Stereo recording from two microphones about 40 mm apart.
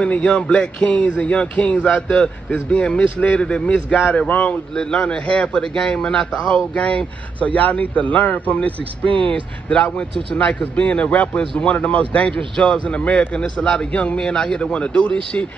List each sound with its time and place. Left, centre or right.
0.0 s a man's voice: left
0.8 s a man's voice: left
4.3 s speech: left
4.7 s a man's voice: left
9.0 s a man's voice: left